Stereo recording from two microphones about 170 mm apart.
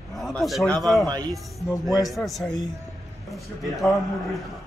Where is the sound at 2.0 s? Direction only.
Centre (ahead or behind).